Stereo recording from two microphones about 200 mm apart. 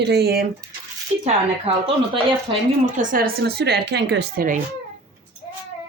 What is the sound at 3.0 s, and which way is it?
Speech, 45° right (ahead or behind).